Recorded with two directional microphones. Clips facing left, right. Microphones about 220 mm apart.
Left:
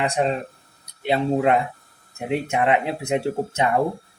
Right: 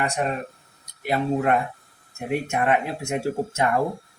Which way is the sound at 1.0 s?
25° left (ahead or behind).